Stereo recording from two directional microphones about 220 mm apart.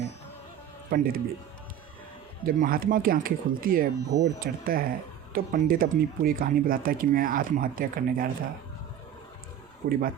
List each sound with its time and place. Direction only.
0.9 s speech: 40° right (ahead or behind)
2.4 s speech: 40° right (ahead or behind)
9.8 s speech: 40° right (ahead or behind)